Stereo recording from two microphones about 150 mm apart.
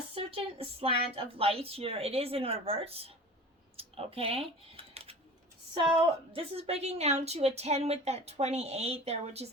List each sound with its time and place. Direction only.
0.1 s speech: 40° right (ahead or behind)
6.3 s a woman's voice: 40° right (ahead or behind)